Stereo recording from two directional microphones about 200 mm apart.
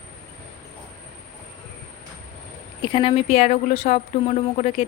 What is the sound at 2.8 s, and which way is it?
A woman's voice, 25° left (ahead or behind).